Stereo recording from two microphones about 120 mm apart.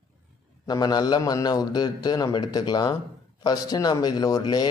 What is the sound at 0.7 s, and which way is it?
A man's voice, 35° left (ahead or behind).